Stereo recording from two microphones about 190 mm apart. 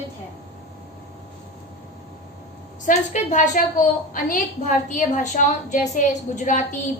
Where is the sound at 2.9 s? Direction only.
40° left (ahead or behind).